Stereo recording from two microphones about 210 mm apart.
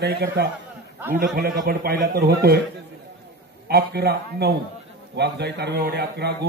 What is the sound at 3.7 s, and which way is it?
Speech, 50° right (ahead or behind).